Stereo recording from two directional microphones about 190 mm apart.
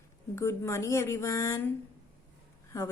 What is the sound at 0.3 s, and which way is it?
Speech, 15° left (ahead or behind).